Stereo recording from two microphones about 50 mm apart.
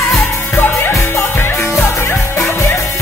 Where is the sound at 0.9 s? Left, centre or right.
Left.